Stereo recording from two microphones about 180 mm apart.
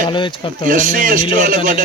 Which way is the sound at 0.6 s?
45° right (ahead or behind).